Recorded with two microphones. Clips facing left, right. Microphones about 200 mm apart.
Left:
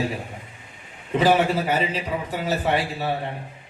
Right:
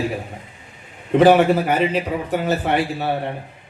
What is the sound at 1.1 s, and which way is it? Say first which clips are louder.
A man's voice: right 6 dB; 60° right (ahead or behind).